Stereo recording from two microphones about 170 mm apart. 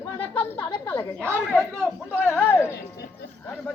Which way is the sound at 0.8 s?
10° left (ahead or behind).